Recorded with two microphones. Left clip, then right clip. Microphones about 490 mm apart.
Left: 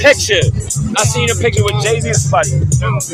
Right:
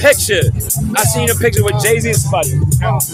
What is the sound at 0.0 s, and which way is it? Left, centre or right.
Music, right.